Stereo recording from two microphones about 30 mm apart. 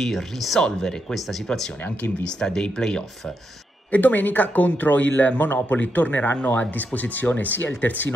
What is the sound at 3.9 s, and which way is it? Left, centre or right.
Speech, left.